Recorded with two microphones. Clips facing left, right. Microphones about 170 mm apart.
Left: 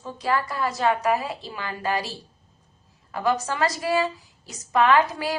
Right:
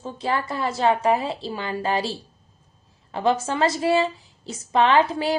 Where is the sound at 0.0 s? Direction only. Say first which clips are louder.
Even; 25° right (ahead or behind).